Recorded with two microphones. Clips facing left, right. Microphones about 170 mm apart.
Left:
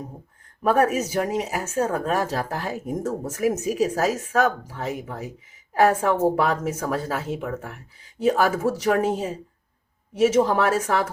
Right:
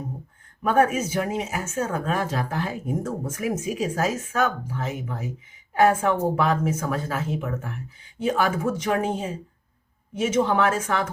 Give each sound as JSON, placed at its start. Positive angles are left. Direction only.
{"t": 0.6, "sound": "speech", "side_deg": 40}